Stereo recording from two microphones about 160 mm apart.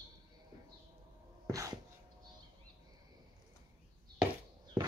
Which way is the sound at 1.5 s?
20° right (ahead or behind).